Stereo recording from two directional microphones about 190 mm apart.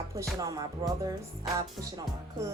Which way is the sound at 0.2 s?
15° right (ahead or behind).